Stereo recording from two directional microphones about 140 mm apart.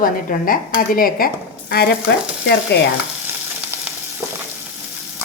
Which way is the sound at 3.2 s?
15° right (ahead or behind).